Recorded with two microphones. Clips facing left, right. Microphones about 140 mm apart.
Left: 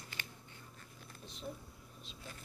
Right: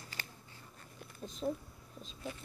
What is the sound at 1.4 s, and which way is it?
Speech, 50° right (ahead or behind).